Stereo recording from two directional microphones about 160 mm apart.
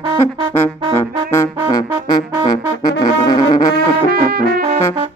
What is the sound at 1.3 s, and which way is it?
Music, 20° left (ahead or behind).